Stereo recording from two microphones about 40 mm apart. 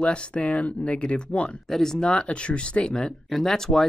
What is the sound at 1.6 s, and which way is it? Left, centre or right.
Speech, centre.